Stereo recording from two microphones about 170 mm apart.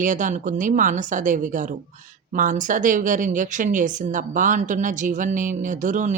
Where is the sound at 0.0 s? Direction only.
50° right (ahead or behind).